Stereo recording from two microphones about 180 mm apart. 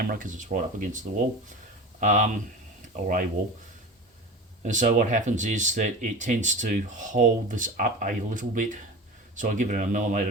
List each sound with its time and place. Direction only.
0.0 s speech: 50° right (ahead or behind)
4.6 s speech: 45° right (ahead or behind)